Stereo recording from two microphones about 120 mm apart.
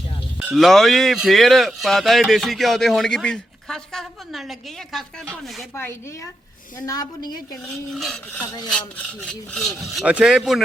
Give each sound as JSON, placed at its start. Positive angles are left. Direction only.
{"t": 0.5, "sound": "speech", "side_deg": 0}
{"t": 5.7, "sound": "a woman's voice", "side_deg": 20}
{"t": 6.8, "sound": "a woman's voice", "side_deg": 30}
{"t": 7.9, "sound": "speech", "side_deg": 5}